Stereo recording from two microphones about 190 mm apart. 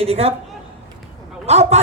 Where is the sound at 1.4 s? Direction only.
35° right (ahead or behind).